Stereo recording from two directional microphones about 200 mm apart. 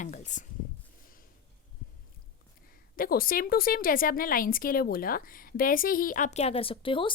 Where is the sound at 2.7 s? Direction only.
45° left (ahead or behind).